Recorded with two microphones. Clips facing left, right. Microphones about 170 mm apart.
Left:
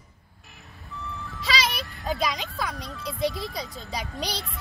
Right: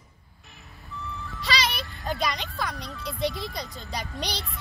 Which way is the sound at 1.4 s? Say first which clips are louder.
Left 1 dB; centre (ahead or behind).